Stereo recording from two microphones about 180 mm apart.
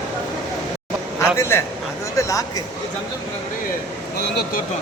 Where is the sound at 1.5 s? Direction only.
15° left (ahead or behind).